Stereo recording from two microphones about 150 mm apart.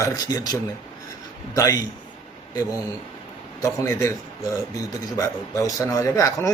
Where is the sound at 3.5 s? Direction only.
20° left (ahead or behind).